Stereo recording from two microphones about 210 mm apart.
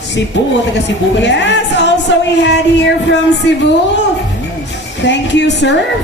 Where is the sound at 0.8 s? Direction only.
60° left (ahead or behind).